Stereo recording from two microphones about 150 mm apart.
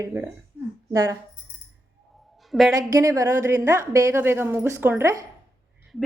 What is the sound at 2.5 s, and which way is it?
Speech, centre (ahead or behind).